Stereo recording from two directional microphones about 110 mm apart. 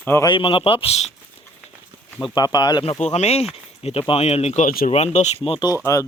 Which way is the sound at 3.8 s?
55° left (ahead or behind).